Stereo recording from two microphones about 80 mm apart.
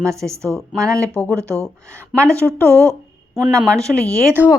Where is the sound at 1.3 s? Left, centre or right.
Right.